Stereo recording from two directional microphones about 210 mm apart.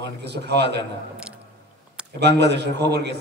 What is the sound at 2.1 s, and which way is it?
A man's voice, 55° right (ahead or behind).